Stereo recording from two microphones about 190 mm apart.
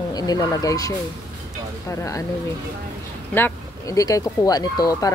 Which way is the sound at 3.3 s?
15° left (ahead or behind).